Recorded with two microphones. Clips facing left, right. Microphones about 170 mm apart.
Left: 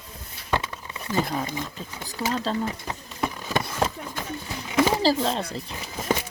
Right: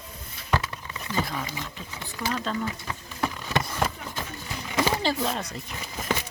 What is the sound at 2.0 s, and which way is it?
Speech, 40° left (ahead or behind).